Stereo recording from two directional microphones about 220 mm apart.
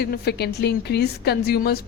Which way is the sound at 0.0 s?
45° left (ahead or behind).